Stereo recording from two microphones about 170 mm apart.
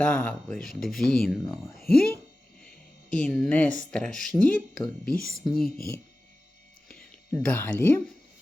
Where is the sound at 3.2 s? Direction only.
5° left (ahead or behind).